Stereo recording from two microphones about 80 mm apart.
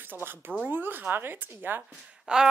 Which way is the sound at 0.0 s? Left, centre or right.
Right.